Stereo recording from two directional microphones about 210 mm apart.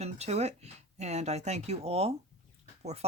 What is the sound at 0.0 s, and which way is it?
Speech, 30° right (ahead or behind).